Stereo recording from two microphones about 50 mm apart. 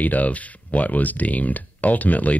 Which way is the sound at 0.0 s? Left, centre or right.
Left.